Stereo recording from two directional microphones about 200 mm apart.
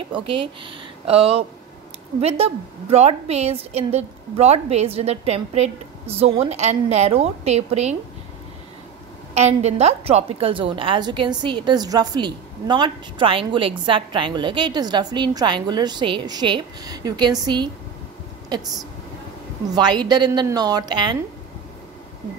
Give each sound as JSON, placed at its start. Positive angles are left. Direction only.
{"t": 0.1, "sound": "a woman's voice", "side_deg": -25}
{"t": 9.3, "sound": "a woman's voice", "side_deg": -35}
{"t": 19.7, "sound": "a woman's voice", "side_deg": -20}